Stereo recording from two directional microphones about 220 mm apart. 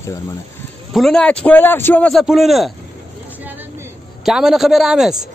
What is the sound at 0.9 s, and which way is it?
Speech, centre (ahead or behind).